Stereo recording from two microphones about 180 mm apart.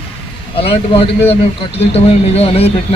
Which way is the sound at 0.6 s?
30° left (ahead or behind).